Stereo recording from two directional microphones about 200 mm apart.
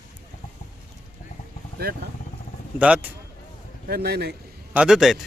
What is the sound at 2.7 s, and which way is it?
Speech, 5° right (ahead or behind).